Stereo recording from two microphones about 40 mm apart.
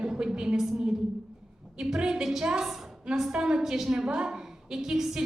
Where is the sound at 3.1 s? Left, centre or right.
Centre.